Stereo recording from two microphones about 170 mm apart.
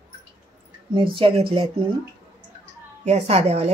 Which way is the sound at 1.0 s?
30° right (ahead or behind).